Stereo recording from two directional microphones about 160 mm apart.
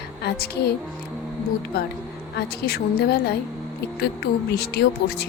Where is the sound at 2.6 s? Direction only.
75° left (ahead or behind).